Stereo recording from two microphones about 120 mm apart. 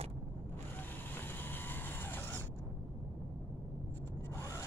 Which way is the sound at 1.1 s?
15° left (ahead or behind).